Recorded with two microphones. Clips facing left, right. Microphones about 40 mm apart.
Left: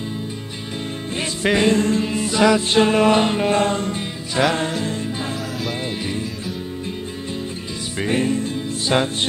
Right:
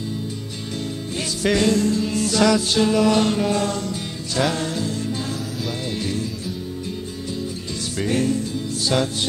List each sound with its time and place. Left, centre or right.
1.4 s music: left
2.1 s music: left
8.0 s music: left